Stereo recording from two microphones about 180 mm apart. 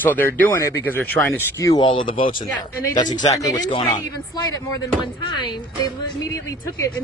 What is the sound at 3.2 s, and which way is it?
Speech, 20° left (ahead or behind).